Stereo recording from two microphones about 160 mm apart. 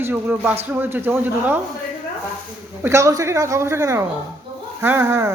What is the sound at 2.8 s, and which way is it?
A man's voice, 20° right (ahead or behind).